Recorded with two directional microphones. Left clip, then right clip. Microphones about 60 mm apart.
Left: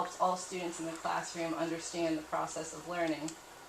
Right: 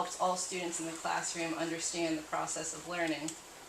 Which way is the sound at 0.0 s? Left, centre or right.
Centre.